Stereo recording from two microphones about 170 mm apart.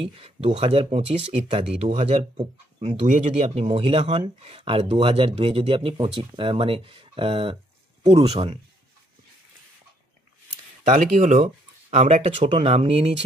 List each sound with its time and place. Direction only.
0.0 s speech: 30° right (ahead or behind)
10.9 s speech: 45° right (ahead or behind)